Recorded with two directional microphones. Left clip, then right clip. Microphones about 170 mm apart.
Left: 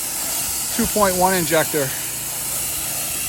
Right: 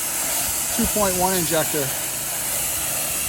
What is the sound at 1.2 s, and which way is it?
Speech, 25° right (ahead or behind).